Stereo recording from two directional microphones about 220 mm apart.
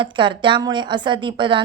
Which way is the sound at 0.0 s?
20° right (ahead or behind).